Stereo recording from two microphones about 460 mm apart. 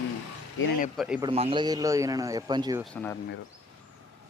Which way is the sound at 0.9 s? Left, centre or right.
Centre.